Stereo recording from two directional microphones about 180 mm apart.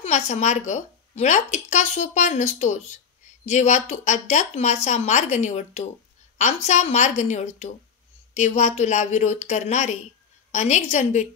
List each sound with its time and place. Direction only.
0.0 s a woman's voice: 40° left (ahead or behind)